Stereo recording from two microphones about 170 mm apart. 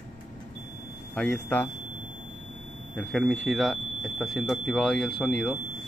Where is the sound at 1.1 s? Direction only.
10° left (ahead or behind).